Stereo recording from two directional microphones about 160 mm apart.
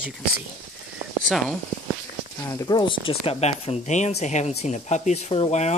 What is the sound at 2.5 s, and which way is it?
Speech, 20° left (ahead or behind).